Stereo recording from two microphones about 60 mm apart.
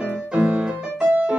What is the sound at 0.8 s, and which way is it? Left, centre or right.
Piano, centre.